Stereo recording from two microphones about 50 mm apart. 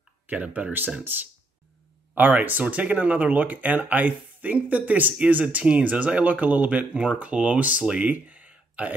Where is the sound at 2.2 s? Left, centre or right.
Right.